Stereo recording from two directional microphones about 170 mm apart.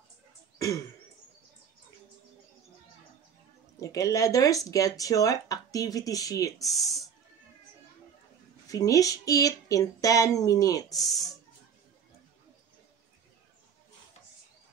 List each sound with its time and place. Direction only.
3.8 s speech: 20° left (ahead or behind)
6.6 s speech: centre (ahead or behind)
8.6 s speech: 20° left (ahead or behind)